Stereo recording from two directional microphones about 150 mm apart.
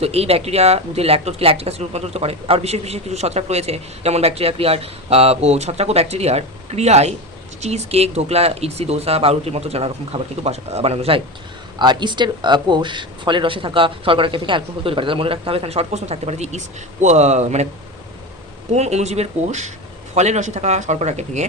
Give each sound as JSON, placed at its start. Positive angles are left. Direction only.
{"t": 0.0, "sound": "speech", "side_deg": -45}
{"t": 11.8, "sound": "speech", "side_deg": -30}
{"t": 18.7, "sound": "speech", "side_deg": -45}